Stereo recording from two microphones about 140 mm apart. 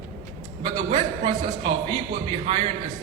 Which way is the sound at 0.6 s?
45° right (ahead or behind).